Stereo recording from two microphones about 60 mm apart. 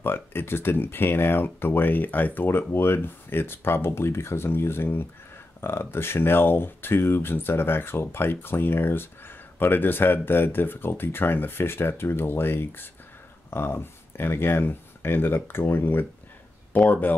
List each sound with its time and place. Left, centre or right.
0.0 s speech: left